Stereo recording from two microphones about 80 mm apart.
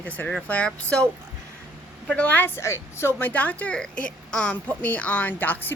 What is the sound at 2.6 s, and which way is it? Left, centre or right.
Speech, left.